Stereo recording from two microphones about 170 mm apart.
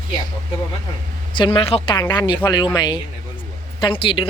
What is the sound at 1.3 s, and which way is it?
Speech, 30° left (ahead or behind).